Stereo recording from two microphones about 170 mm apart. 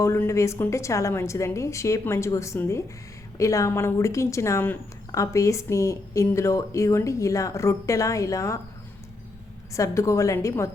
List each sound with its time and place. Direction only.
0.0 s speech: 15° left (ahead or behind)
9.7 s speech: 20° left (ahead or behind)